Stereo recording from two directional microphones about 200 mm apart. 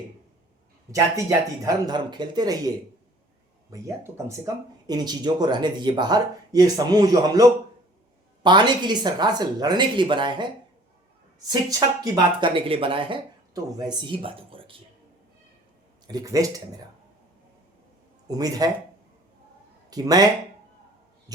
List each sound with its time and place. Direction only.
0.9 s speech: 15° right (ahead or behind)
16.0 s speech: 20° right (ahead or behind)
18.3 s speech: 20° right (ahead or behind)
19.9 s speech: 20° right (ahead or behind)
21.3 s heart sounds: 20° right (ahead or behind)